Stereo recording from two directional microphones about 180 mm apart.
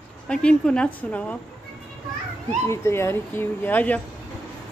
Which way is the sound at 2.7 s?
15° left (ahead or behind).